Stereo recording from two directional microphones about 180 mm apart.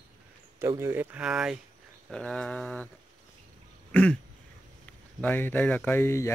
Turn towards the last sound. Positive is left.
turn(degrees=15)  # may be behind; listen again after turning